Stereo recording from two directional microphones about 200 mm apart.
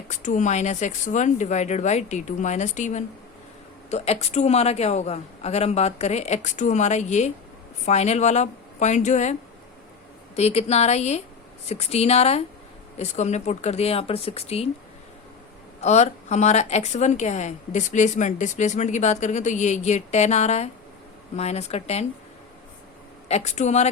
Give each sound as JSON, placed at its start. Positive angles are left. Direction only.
{"t": 0.1, "sound": "a woman's voice", "side_deg": 40}
{"t": 10.3, "sound": "a woman's voice", "side_deg": 30}
{"t": 15.8, "sound": "a woman's voice", "side_deg": 35}
{"t": 23.3, "sound": "a woman's voice", "side_deg": 35}